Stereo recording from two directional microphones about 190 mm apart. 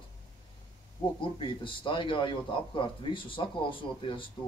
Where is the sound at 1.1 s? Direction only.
25° left (ahead or behind).